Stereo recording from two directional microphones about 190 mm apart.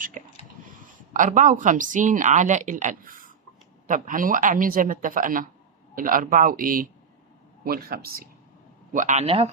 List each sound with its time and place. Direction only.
0.2 s a sound: 40° right (ahead or behind)
1.1 s speech: 45° right (ahead or behind)
8.9 s speech: 40° right (ahead or behind)